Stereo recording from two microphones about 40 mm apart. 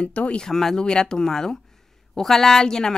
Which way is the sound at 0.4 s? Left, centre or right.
Centre.